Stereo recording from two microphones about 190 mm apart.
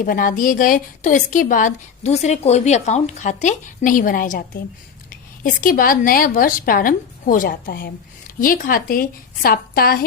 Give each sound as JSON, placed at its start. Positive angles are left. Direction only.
{"t": 0.0, "sound": "a woman's voice", "side_deg": 45}